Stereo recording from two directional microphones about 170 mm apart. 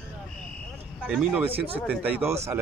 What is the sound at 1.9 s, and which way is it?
Speech, 10° right (ahead or behind).